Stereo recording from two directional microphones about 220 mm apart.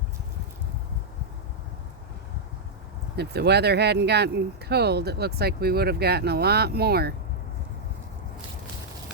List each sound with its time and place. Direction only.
3.2 s speech: 50° right (ahead or behind)